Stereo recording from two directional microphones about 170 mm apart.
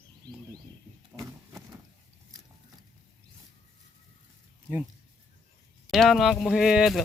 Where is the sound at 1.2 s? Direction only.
20° right (ahead or behind).